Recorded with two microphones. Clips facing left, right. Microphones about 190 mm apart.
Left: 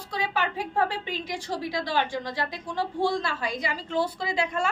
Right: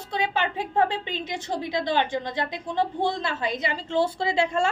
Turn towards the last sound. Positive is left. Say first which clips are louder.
# right 4 dB
turn(degrees=-25)  # may be behind; listen again after turning